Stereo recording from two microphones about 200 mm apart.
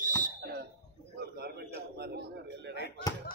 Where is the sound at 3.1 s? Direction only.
20° left (ahead or behind).